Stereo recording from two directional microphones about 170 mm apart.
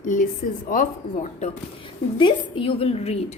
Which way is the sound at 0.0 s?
50° left (ahead or behind).